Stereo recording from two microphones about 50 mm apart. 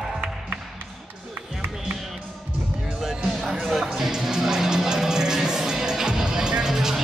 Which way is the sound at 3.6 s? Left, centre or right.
Centre.